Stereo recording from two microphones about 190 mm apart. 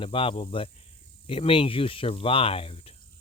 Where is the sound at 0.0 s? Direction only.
30° left (ahead or behind).